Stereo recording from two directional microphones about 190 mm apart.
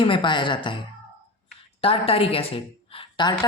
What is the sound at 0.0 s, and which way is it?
A woman's voice, 25° left (ahead or behind).